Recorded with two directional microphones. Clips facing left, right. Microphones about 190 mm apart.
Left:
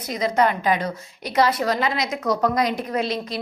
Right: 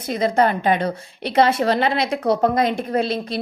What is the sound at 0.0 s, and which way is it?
A woman's voice, 30° right (ahead or behind).